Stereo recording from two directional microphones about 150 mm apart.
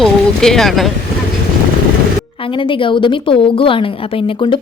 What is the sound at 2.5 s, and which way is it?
A woman's voice, 35° left (ahead or behind).